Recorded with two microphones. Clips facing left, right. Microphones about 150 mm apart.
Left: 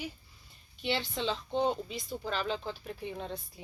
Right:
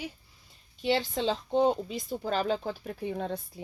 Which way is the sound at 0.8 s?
40° right (ahead or behind).